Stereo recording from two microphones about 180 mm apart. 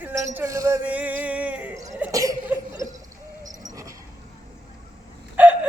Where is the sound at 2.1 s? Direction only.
20° right (ahead or behind).